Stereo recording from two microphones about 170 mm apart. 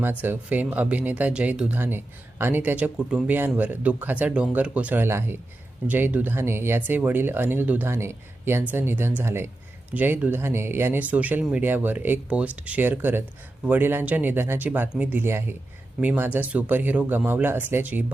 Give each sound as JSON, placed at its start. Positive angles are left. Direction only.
{"t": 0.0, "sound": "speech", "side_deg": -10}